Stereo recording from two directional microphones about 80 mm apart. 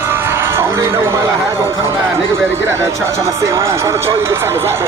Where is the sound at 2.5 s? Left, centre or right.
Right.